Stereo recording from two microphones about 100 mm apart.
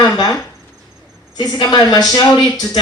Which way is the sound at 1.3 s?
45° left (ahead or behind).